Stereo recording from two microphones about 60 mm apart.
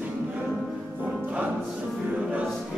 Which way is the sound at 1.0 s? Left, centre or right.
Centre.